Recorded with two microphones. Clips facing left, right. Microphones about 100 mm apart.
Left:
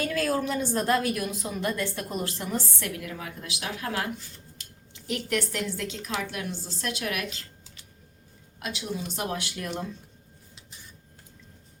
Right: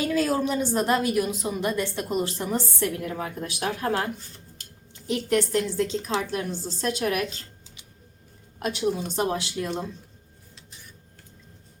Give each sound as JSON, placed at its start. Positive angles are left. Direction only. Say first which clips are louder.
{"t": 0.0, "sound": "a woman's voice", "louder": "right 3 dB", "side_deg": -20}
{"t": 4.6, "sound": "a sound", "louder": "right 1 dB", "side_deg": -45}
{"t": 5.0, "sound": "a woman's voice", "louder": "right 5 dB", "side_deg": -25}
{"t": 8.5, "sound": "a woman's voice", "louder": "right 8 dB", "side_deg": -40}
{"t": 9.1, "sound": "a woman's voice", "louder": "right 6 dB", "side_deg": -30}